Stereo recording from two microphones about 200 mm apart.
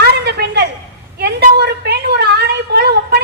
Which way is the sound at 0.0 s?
55° right (ahead or behind).